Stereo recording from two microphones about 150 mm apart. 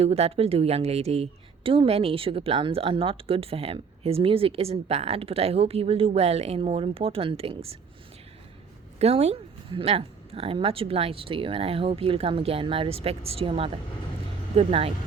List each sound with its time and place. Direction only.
0.0 s a woman's voice: 40° right (ahead or behind)
9.0 s a woman's voice: 45° right (ahead or behind)